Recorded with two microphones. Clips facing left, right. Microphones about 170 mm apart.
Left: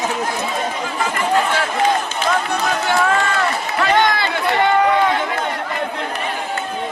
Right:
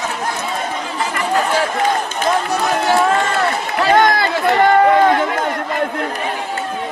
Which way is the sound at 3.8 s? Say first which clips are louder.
Right 4 dB; 45° right (ahead or behind).